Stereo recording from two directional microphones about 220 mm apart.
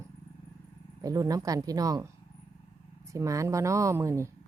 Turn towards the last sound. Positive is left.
turn(degrees=-15)  # may be behind; listen again after turning